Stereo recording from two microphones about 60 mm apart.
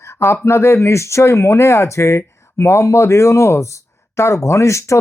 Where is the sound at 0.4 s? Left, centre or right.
Left.